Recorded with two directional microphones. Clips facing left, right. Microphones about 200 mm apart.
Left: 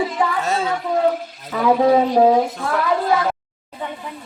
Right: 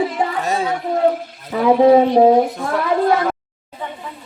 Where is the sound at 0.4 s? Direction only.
15° right (ahead or behind).